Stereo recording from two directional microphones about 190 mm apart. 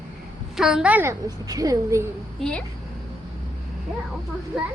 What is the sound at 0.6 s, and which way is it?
A woman's voice, centre (ahead or behind).